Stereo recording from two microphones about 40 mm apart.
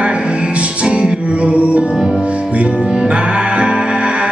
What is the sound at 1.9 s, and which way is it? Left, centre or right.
Music, centre.